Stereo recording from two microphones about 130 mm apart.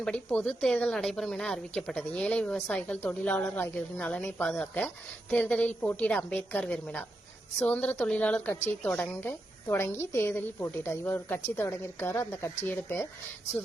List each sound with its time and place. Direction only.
0.0 s a woman's voice: 5° left (ahead or behind)